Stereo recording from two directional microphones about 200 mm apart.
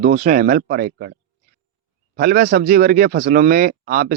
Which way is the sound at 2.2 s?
45° right (ahead or behind).